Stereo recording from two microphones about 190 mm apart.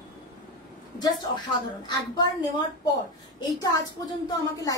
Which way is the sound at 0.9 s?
20° left (ahead or behind).